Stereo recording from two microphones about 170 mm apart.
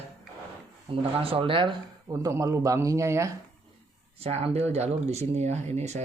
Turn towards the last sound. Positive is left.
turn(degrees=-40)  # may be behind; listen again after turning